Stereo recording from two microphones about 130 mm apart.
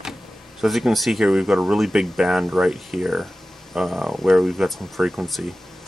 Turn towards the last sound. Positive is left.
turn(degrees=0)  # may be behind; listen again after turning